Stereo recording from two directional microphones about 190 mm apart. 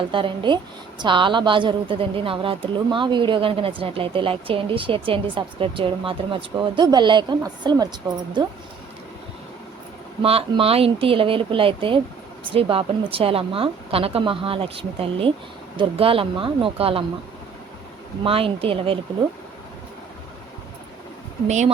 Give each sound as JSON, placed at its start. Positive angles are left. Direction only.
{"t": 0.1, "sound": "a woman's voice", "side_deg": -25}
{"t": 10.2, "sound": "a woman's voice", "side_deg": -30}
{"t": 18.2, "sound": "a woman's voice", "side_deg": -30}
{"t": 21.4, "sound": "speech", "side_deg": -40}